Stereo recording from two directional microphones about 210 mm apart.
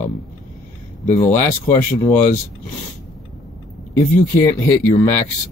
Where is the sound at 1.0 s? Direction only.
30° left (ahead or behind).